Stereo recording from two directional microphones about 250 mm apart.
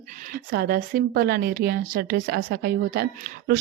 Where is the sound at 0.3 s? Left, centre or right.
Right.